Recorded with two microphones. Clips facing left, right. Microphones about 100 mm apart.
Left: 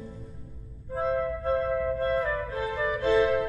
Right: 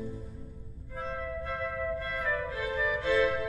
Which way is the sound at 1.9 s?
35° left (ahead or behind).